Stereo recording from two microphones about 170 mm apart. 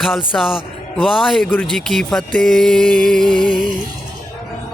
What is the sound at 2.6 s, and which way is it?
Speech, 5° left (ahead or behind).